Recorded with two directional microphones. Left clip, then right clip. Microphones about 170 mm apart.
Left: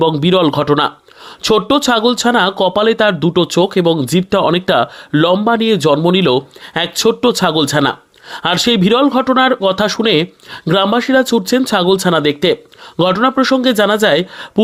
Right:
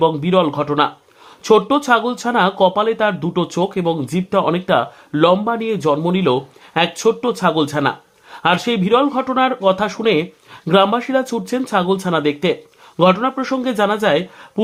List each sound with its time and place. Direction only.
0.2 s speech: 40° left (ahead or behind)